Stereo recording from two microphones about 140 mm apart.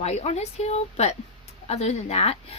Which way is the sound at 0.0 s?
50° left (ahead or behind).